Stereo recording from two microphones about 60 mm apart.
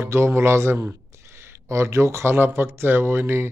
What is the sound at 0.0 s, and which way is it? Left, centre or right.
Speech, right.